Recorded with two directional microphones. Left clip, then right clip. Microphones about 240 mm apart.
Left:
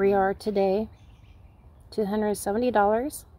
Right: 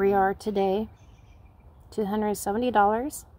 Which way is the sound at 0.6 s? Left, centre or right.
Right.